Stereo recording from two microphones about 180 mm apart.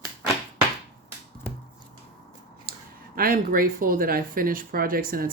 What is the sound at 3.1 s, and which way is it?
Speech, 55° right (ahead or behind).